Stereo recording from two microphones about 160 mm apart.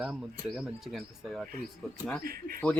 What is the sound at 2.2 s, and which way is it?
Speech, 65° right (ahead or behind).